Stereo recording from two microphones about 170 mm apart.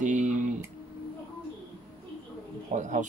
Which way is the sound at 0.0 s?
45° right (ahead or behind).